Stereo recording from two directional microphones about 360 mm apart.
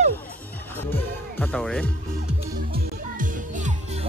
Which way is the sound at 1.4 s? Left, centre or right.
Centre.